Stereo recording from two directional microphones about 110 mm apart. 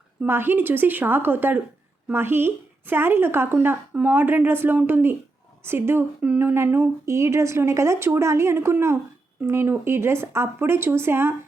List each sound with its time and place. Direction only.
0.2 s a woman's voice: 20° right (ahead or behind)